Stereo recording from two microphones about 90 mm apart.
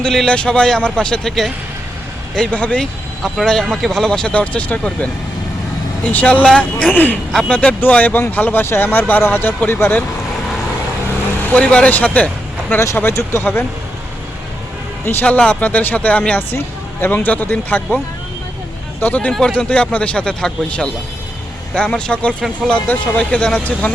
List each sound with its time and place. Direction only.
0.0 s speech: 5° left (ahead or behind)
3.2 s speech: 5° left (ahead or behind); by 10.0 s 25° left (ahead or behind)
11.4 s speech: 15° left (ahead or behind)
12.8 s speech: 30° left (ahead or behind)
15.0 s speech: 20° left (ahead or behind)
18.9 s speech: 20° left (ahead or behind)
19.3 s speech: 10° left (ahead or behind)